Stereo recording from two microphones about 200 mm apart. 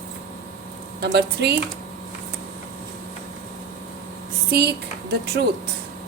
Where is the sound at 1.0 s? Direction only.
55° right (ahead or behind).